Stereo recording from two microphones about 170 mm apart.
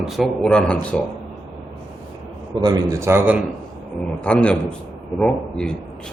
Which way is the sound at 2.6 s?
20° right (ahead or behind).